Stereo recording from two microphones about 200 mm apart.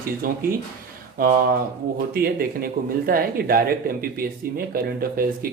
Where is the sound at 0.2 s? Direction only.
45° right (ahead or behind).